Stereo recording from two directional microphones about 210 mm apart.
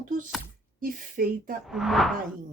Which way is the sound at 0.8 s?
40° right (ahead or behind).